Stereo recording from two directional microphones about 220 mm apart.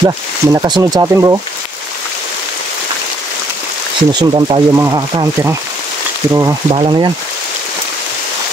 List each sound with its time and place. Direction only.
0.0 s speech: 20° right (ahead or behind)
4.1 s speech: 20° right (ahead or behind)